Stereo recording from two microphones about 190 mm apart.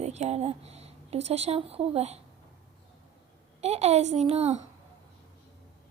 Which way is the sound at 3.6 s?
35° right (ahead or behind).